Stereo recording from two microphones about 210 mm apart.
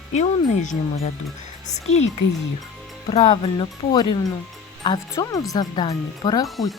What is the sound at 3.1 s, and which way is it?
Speech, 25° left (ahead or behind).